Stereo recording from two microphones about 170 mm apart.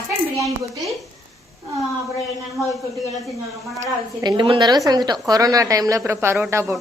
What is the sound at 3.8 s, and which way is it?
A woman's voice, 25° right (ahead or behind).